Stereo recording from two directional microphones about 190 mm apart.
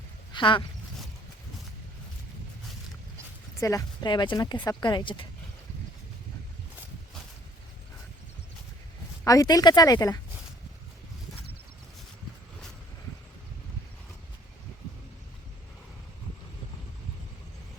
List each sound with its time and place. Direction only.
0.3 s speech: 25° left (ahead or behind)
3.6 s speech: 15° left (ahead or behind)
9.2 s speech: 20° left (ahead or behind)